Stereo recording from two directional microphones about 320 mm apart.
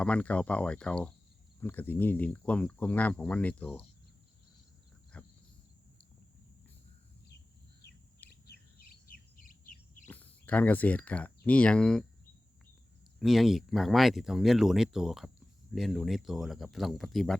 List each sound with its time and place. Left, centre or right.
0.0 s speech: centre
5.1 s cricket: centre
8.3 s chirp: left
10.1 s speech: centre
13.1 s speech: centre